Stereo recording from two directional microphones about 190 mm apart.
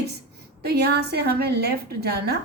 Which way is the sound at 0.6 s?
60° right (ahead or behind).